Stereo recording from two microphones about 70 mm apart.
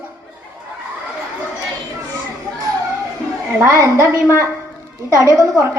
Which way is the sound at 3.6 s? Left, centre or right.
Right.